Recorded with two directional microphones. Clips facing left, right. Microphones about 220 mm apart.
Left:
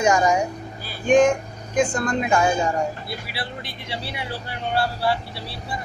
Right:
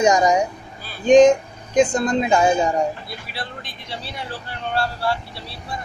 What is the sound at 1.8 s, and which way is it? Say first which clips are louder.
Speech: right 4 dB; 20° right (ahead or behind).